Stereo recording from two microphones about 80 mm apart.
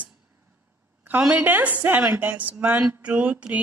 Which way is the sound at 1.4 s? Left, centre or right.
Right.